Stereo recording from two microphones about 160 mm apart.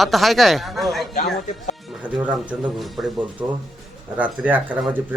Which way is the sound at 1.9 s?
5° right (ahead or behind).